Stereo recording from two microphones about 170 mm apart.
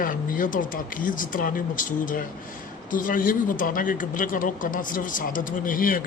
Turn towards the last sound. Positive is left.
turn(degrees=55)  # may be behind; listen again after turning